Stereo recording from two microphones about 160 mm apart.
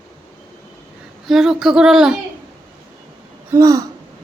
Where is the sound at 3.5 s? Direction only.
20° right (ahead or behind).